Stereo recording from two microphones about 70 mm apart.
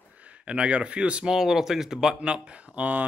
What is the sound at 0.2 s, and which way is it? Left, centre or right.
Speech, centre.